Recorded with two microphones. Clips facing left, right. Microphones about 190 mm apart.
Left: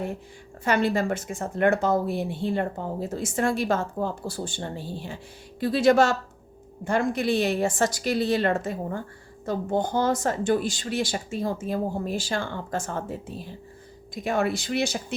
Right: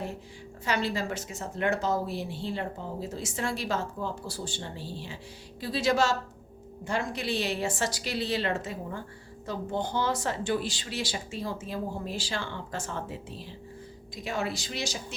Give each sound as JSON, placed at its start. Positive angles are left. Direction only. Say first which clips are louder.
{"t": 0.6, "sound": "speech", "louder": "left 6 dB", "side_deg": 55}